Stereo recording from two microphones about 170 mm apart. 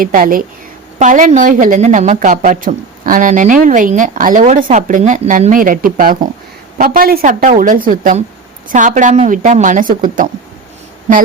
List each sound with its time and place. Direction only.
0.0 s a woman's voice: 55° right (ahead or behind)